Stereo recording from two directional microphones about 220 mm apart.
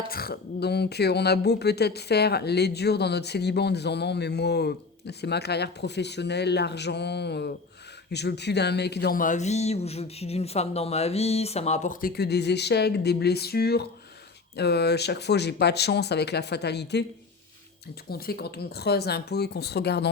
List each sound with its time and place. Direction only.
0.1 s speech: 45° left (ahead or behind)
18.1 s speech: 45° left (ahead or behind)